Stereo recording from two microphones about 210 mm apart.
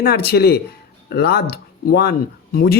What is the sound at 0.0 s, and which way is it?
Speech, 45° left (ahead or behind).